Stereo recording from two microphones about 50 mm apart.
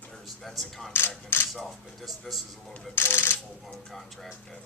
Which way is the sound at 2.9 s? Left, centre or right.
Left.